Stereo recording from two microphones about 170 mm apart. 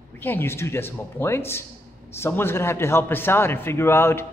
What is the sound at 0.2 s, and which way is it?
A man's voice, 10° left (ahead or behind).